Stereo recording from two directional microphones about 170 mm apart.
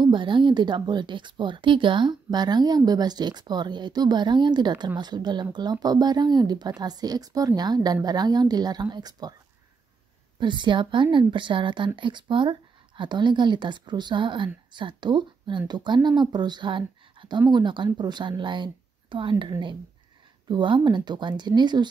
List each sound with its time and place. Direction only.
0.0 s a woman's voice: 30° right (ahead or behind)
10.4 s a woman's voice: 25° right (ahead or behind)